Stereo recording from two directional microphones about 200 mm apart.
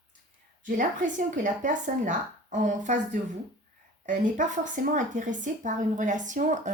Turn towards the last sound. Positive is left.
turn(degrees=-40)  # may be behind; listen again after turning